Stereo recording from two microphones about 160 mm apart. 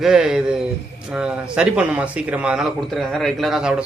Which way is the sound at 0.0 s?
Centre (ahead or behind).